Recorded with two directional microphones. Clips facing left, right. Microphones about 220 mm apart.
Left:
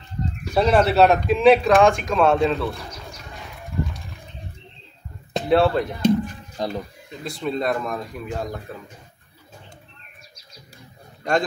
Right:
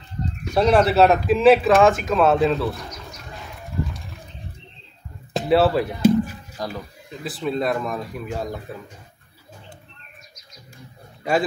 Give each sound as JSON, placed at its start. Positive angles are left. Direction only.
{"t": 0.5, "sound": "speech", "side_deg": 0}
{"t": 3.8, "sound": "a sound", "side_deg": 0}
{"t": 5.3, "sound": "speech", "side_deg": -5}
{"t": 6.6, "sound": "speech", "side_deg": 25}
{"t": 7.2, "sound": "speech", "side_deg": 0}